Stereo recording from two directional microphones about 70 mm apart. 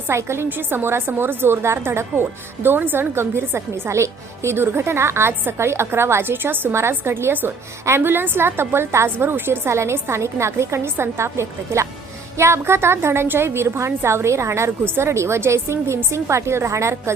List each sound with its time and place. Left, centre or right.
0.1 s a woman's voice: right